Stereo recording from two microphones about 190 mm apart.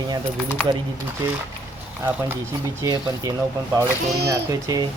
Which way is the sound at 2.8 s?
20° right (ahead or behind).